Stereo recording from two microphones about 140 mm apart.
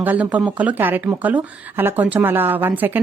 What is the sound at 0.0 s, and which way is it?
Speech, 10° right (ahead or behind).